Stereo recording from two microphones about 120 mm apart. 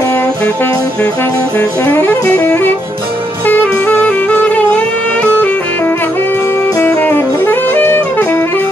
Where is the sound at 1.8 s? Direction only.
20° left (ahead or behind).